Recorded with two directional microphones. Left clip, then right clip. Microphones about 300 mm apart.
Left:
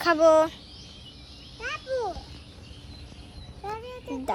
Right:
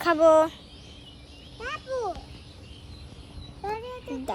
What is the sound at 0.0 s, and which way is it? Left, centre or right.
Speech, centre.